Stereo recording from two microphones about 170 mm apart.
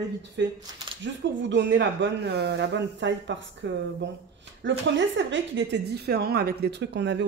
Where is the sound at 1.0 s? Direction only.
90° right.